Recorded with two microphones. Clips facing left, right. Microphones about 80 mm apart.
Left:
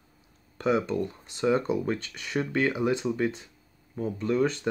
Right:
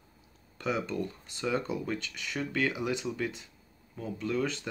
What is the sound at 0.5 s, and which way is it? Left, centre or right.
Speech, left.